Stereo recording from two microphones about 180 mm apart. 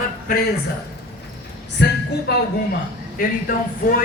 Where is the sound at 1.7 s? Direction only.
70° left (ahead or behind).